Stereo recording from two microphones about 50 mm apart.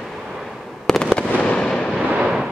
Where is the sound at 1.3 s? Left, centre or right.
Left.